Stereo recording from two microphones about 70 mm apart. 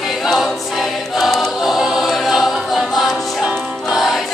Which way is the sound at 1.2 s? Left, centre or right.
Centre.